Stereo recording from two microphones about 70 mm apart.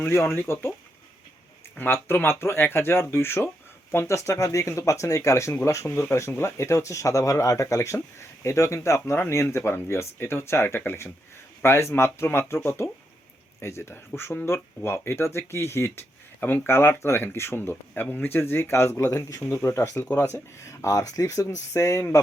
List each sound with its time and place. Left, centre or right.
0.0 s speech: left
1.8 s speech: left
16.4 s speech: left
17.9 s speech: left
19.4 s speech: left
20.1 s speech: left
20.3 s speech: left